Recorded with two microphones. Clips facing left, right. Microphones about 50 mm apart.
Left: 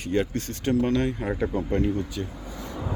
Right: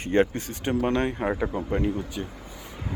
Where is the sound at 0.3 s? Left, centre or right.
Centre.